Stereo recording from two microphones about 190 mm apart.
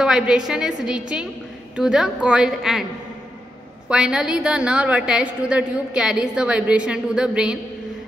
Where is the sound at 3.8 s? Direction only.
5° right (ahead or behind).